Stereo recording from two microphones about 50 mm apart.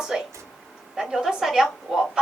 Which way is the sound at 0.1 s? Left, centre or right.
Centre.